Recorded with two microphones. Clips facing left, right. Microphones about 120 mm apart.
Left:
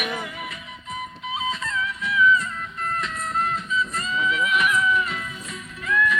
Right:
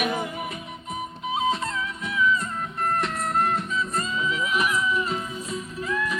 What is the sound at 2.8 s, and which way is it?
Music, 60° right (ahead or behind).